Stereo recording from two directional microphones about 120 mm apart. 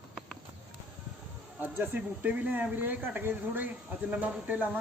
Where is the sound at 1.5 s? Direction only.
15° right (ahead or behind).